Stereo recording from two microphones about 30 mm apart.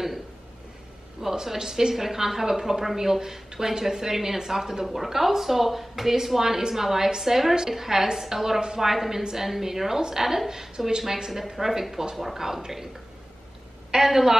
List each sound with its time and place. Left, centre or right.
1.3 s a woman's voice: centre
13.9 s a woman's voice: centre